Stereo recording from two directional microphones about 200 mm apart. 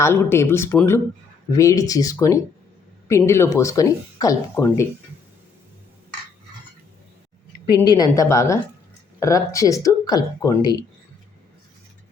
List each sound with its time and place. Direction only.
0.0 s speech: 10° left (ahead or behind)
7.8 s speech: 20° left (ahead or behind)